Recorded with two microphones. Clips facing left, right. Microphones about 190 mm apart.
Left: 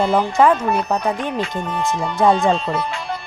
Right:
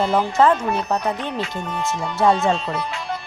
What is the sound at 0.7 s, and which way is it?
Speech, 10° left (ahead or behind).